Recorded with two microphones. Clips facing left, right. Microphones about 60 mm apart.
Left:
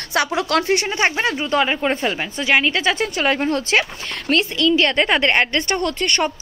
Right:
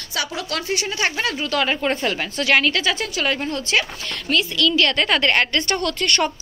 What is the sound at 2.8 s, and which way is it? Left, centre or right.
Speech, left.